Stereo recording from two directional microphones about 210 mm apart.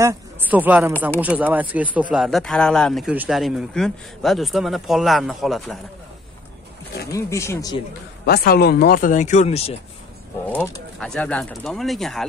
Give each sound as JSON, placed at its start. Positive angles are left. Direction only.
{"t": 0.0, "sound": "speech", "side_deg": -10}
{"t": 7.1, "sound": "speech", "side_deg": 15}
{"t": 8.3, "sound": "speech", "side_deg": 50}
{"t": 10.4, "sound": "speech", "side_deg": 10}